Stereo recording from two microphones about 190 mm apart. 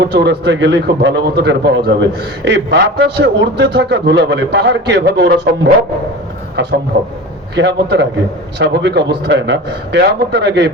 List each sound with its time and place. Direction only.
0.0 s a man's voice: 65° right (ahead or behind)
6.6 s a man's voice: 65° right (ahead or behind)